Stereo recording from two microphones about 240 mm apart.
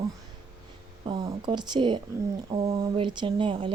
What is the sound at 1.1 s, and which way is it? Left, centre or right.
A woman's voice, centre.